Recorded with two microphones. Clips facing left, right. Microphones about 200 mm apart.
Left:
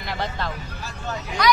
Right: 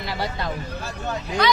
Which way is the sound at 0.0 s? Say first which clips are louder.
Right 1 dB; 5° right (ahead or behind).